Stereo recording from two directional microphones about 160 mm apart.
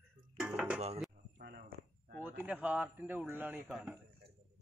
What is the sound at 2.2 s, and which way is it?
Speech, 10° right (ahead or behind).